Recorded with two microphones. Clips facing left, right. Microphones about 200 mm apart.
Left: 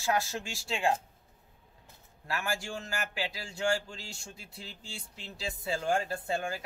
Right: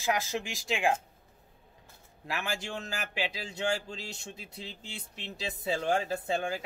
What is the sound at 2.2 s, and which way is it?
Speech, 20° right (ahead or behind).